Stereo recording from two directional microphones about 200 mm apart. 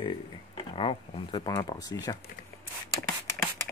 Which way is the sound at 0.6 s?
25° left (ahead or behind).